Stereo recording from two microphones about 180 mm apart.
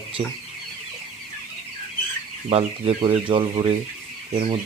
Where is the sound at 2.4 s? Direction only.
30° right (ahead or behind).